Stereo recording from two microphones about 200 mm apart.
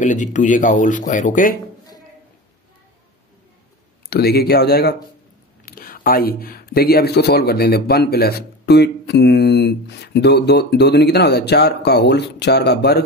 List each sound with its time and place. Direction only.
0.0 s speech: 40° left (ahead or behind)
4.1 s speech: 50° left (ahead or behind)